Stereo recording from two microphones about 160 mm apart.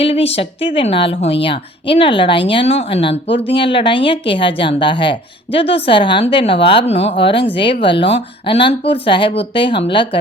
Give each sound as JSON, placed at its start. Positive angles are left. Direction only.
{"t": 0.0, "sound": "speech", "side_deg": 40}